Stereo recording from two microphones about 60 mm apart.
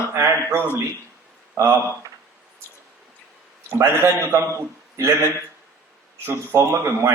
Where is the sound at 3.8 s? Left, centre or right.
Right.